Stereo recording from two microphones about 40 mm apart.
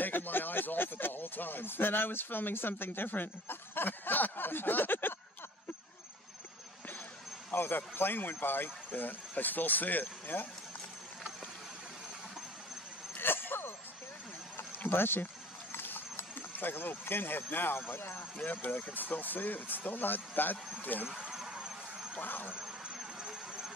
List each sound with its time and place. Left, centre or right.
0.0 s speech: left
7.5 s speech: left
13.2 s vehicle: left
14.6 s a sound: left
15.7 s speech: left
18.4 s speech: left
21.1 s a sound: centre
22.1 s speech: left
22.5 s vehicle: centre